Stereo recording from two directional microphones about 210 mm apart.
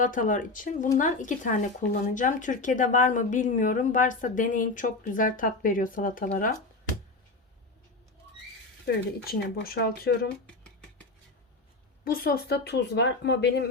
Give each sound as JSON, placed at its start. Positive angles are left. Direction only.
{"t": 0.0, "sound": "speech", "side_deg": 40}
{"t": 9.2, "sound": "speech", "side_deg": 45}
{"t": 10.4, "sound": "music", "side_deg": 5}
{"t": 12.0, "sound": "speech", "side_deg": 45}